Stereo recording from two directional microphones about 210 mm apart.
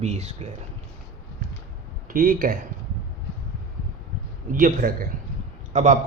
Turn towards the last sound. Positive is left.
turn(degrees=-35)  # may be behind; listen again after turning